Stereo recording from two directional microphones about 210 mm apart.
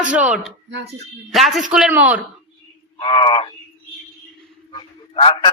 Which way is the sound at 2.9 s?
25° left (ahead or behind).